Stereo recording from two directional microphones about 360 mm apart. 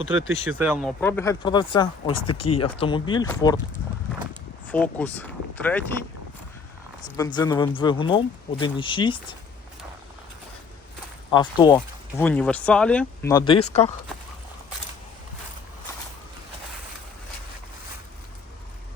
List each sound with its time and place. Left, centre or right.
0.6 s speech: centre
2.2 s speech: left
2.5 s speech: centre
4.7 s speech: centre
7.2 s speech: centre
11.3 s speech: centre